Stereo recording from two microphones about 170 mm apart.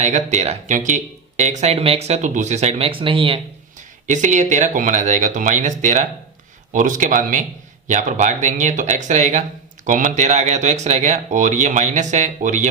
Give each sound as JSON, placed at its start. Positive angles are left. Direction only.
{"t": 0.0, "sound": "speech", "side_deg": -45}
{"t": 4.0, "sound": "speech", "side_deg": -45}